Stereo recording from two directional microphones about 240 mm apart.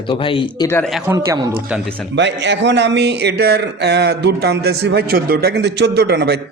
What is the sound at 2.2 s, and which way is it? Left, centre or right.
Speech, right.